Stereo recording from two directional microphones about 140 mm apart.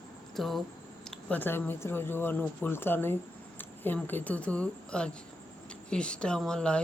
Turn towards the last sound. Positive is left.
turn(degrees=5)  # may be behind; listen again after turning